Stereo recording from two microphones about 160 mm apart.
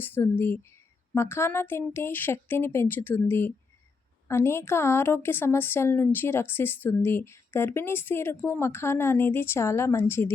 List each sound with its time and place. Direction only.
0.0 s a woman's voice: 15° left (ahead or behind)